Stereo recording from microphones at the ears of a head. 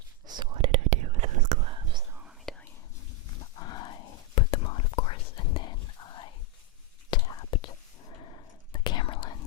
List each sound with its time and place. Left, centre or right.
0.3 s whispering: right
3.2 s whispering: left